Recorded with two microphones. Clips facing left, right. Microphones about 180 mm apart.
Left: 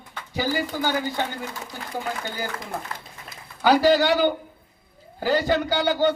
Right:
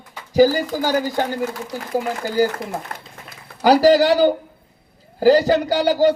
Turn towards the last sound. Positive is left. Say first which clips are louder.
# right 5 dB
turn(degrees=-35)  # may be behind; listen again after turning